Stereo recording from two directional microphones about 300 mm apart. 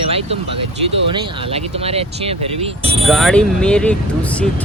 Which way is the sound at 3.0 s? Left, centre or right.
Centre.